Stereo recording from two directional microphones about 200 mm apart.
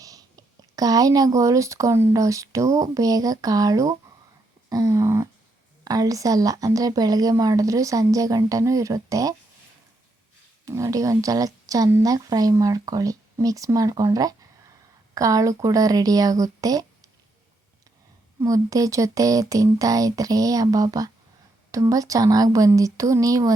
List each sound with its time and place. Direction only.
0.0 s speech: 20° right (ahead or behind)
10.7 s speech: 15° right (ahead or behind)
18.3 s speech: 15° right (ahead or behind)